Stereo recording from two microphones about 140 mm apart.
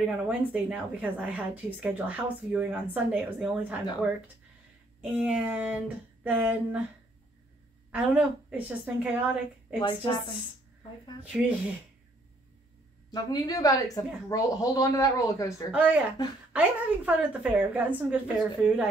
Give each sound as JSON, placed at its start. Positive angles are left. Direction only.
{"t": 0.2, "sound": "a woman's voice", "side_deg": -10}
{"t": 5.1, "sound": "a woman's voice", "side_deg": -10}
{"t": 7.9, "sound": "a woman's voice", "side_deg": -10}
{"t": 9.8, "sound": "a woman's voice", "side_deg": 35}
{"t": 11.2, "sound": "a woman's voice", "side_deg": -10}
{"t": 13.1, "sound": "a woman's voice", "side_deg": 30}
{"t": 15.7, "sound": "a woman's voice", "side_deg": -10}
{"t": 16.2, "sound": "a woman's voice", "side_deg": 30}
{"t": 16.5, "sound": "a woman's voice", "side_deg": -10}